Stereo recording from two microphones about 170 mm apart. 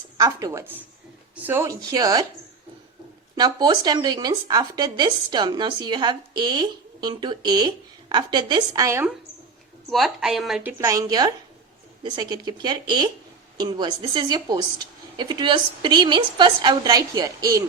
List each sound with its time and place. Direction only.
0.2 s speech: 20° right (ahead or behind)
3.3 s speech: 25° right (ahead or behind)
9.9 s a woman's voice: centre (ahead or behind); by 17.6 s 20° right (ahead or behind)